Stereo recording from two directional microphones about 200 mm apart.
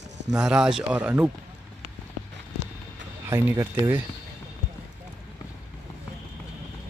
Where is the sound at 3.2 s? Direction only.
10° right (ahead or behind).